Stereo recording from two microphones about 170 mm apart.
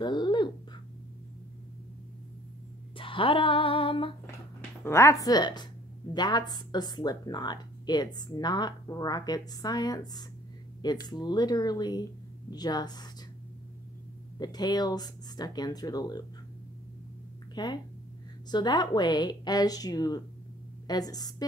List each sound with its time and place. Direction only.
0.0 s speech: 25° left (ahead or behind)
3.0 s female singing: 30° left (ahead or behind)
4.8 s speech: 15° left (ahead or behind)
14.4 s speech: 25° left (ahead or behind)
17.6 s speech: 25° left (ahead or behind)